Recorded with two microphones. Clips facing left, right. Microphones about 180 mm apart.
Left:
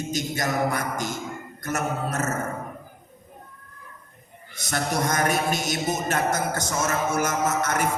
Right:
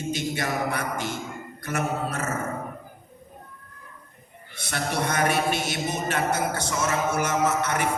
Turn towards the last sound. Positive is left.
turn(degrees=45)  # may be behind; listen again after turning